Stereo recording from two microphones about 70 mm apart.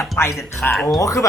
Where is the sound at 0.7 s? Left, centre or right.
Centre.